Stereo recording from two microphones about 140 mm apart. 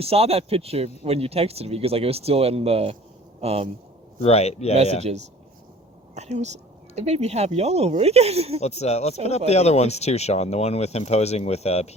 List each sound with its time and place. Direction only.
0.0 s speech: 45° right (ahead or behind)
4.2 s speech: 50° left (ahead or behind)
6.1 s speech: 55° right (ahead or behind)
8.6 s speech: 50° left (ahead or behind)